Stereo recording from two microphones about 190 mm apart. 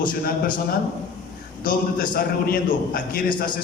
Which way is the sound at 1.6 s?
50° left (ahead or behind).